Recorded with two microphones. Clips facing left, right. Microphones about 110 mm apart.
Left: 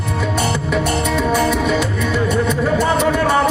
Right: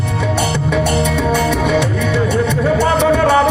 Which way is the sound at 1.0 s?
70° right (ahead or behind).